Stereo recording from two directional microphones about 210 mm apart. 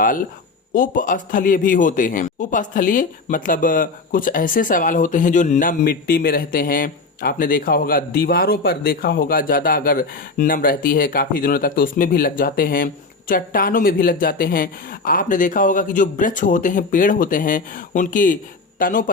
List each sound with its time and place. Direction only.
0.7 s a man's voice: 40° left (ahead or behind)